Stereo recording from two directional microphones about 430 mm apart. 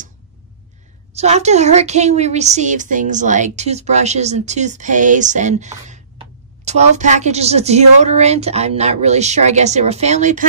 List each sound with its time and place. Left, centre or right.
1.1 s a woman's voice: centre